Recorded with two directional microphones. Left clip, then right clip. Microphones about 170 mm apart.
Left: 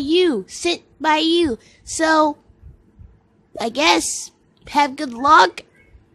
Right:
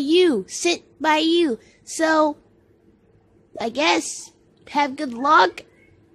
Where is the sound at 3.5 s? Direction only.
10° left (ahead or behind).